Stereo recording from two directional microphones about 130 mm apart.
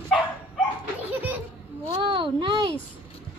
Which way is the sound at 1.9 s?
40° right (ahead or behind).